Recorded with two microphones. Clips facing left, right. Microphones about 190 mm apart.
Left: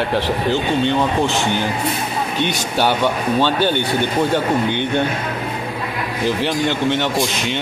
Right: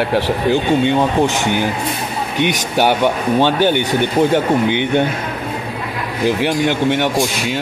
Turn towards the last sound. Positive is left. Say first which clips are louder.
# right 2 dB
turn(degrees=-10)  # may be behind; listen again after turning